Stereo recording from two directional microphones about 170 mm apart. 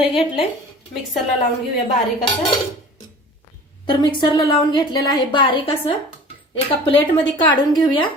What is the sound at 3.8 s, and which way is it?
A woman's voice, 30° left (ahead or behind).